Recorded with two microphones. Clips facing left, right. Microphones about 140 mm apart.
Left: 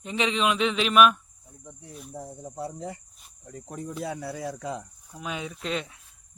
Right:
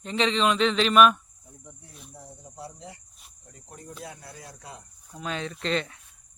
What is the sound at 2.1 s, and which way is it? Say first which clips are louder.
Speech: left 9 dB; 45° left (ahead or behind).